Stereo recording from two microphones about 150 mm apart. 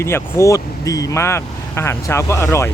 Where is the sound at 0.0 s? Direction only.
15° left (ahead or behind).